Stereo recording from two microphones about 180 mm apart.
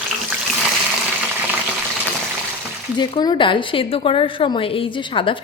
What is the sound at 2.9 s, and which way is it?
A woman's voice, 25° left (ahead or behind).